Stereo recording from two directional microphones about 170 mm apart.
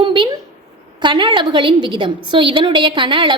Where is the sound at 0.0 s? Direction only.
30° right (ahead or behind).